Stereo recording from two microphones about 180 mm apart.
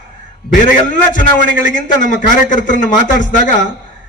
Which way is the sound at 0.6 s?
45° left (ahead or behind).